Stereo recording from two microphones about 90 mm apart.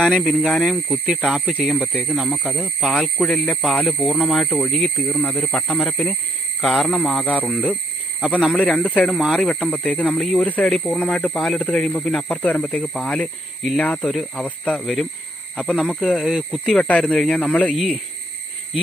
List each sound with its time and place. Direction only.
0.2 s speech: 5° left (ahead or behind)
4.4 s speech: 10° left (ahead or behind)
14.0 s speech: 5° left (ahead or behind)
14.4 s speech: 15° left (ahead or behind)
17.7 s speech: centre (ahead or behind)